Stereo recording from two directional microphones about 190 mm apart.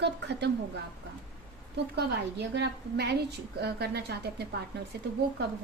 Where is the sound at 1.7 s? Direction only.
60° right (ahead or behind).